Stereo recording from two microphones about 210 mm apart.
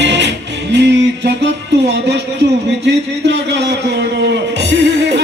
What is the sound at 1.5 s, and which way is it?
Speech, 55° right (ahead or behind).